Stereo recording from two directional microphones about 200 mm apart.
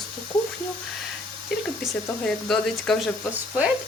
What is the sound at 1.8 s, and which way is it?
Speech, centre (ahead or behind).